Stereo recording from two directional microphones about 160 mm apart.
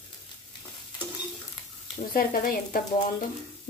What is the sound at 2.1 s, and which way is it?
Speech, 65° left (ahead or behind).